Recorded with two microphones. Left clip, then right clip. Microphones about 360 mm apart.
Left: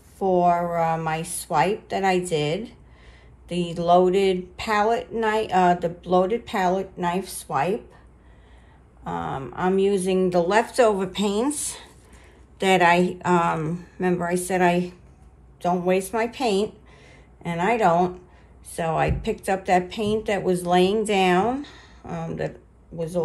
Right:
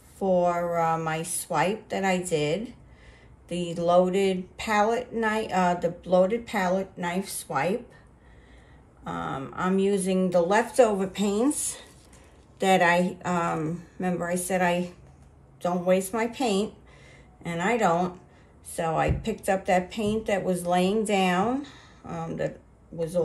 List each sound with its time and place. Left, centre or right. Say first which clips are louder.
0.2 s speech: left 4 dB; centre
9.0 s speech: left 3 dB; centre